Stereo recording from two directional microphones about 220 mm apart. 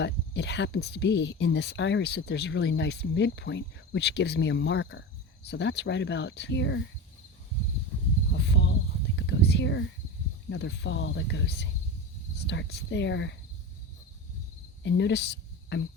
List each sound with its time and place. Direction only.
0.0 s speech: 50° left (ahead or behind)
8.4 s speech: 50° left (ahead or behind)
9.1 s whispering: 50° left (ahead or behind)
10.5 s speech: 50° left (ahead or behind)
14.8 s speech: 55° left (ahead or behind)